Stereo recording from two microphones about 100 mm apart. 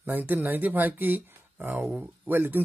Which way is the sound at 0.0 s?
20° right (ahead or behind).